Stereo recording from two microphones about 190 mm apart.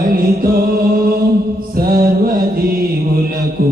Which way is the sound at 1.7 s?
50° right (ahead or behind).